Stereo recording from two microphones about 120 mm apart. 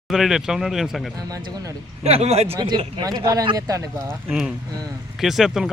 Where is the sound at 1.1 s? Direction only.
30° right (ahead or behind).